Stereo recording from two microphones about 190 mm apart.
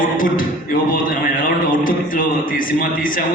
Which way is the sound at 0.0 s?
45° left (ahead or behind).